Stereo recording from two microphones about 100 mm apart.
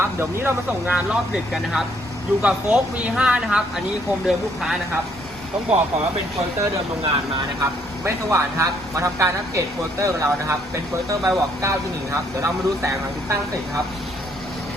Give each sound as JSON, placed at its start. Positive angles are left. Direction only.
{"t": 0.0, "sound": "speech", "side_deg": -25}
{"t": 0.9, "sound": "speech", "side_deg": -10}
{"t": 7.6, "sound": "a man's voice", "side_deg": -30}